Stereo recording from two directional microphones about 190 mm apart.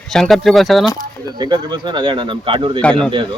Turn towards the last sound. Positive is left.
turn(degrees=5)  # may be behind; listen again after turning